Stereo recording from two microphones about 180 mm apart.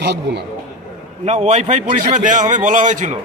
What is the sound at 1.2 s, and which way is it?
A man's voice, 40° right (ahead or behind).